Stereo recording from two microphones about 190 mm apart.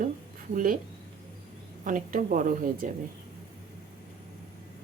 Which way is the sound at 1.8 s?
45° right (ahead or behind).